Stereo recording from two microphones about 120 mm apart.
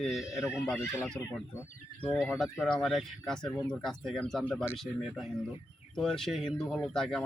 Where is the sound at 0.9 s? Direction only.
20° left (ahead or behind).